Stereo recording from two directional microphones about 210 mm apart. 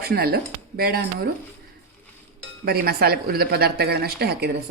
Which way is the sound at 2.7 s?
50° right (ahead or behind).